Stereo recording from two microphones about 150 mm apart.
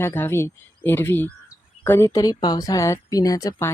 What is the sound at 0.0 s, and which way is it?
Speech, 15° left (ahead or behind).